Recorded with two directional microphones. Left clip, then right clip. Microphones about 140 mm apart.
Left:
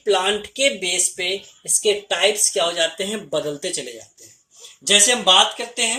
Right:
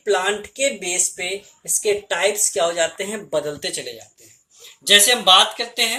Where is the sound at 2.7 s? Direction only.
65° left (ahead or behind).